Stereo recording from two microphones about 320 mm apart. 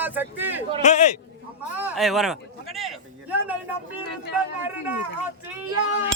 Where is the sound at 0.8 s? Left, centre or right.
Left.